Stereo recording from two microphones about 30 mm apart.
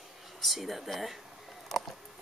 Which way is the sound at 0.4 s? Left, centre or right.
Centre.